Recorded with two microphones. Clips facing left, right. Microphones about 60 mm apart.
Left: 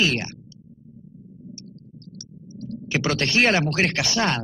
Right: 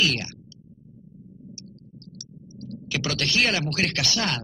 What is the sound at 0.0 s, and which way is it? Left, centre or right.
Speech, left.